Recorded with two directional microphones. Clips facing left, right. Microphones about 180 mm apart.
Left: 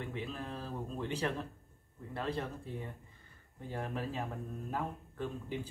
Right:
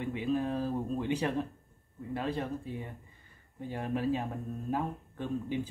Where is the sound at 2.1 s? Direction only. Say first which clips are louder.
Right 3 dB; 15° right (ahead or behind).